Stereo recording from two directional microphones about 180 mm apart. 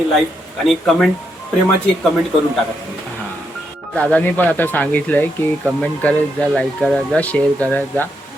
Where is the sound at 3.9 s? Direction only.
10° left (ahead or behind).